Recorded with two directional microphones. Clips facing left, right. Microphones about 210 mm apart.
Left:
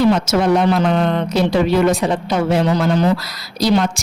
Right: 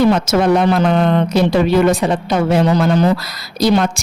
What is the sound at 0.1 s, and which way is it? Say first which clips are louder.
Speech: right 2 dB; 55° right (ahead or behind).